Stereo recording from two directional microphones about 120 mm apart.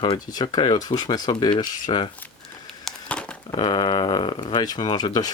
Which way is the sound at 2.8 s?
10° left (ahead or behind).